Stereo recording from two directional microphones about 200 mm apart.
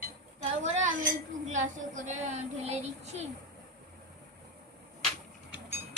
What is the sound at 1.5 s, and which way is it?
Speech, 40° right (ahead or behind).